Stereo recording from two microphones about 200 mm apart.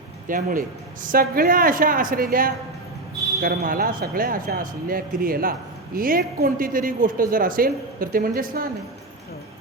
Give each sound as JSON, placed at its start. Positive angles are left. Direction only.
{"t": 0.3, "sound": "speech", "side_deg": -45}